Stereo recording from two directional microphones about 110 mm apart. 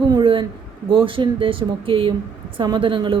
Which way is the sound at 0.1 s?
45° right (ahead or behind).